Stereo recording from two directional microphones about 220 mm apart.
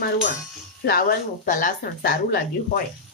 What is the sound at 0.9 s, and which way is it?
Speech, 45° left (ahead or behind).